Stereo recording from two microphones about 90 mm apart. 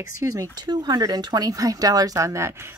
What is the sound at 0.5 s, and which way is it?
Speech, 50° right (ahead or behind).